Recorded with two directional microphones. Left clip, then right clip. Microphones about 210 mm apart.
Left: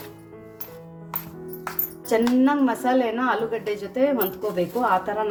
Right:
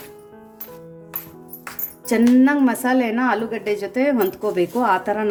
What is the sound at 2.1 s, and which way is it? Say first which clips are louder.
A woman's voice: right 4 dB; 40° right (ahead or behind).